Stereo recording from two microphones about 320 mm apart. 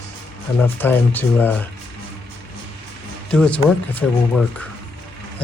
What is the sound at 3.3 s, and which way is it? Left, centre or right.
Speech, centre.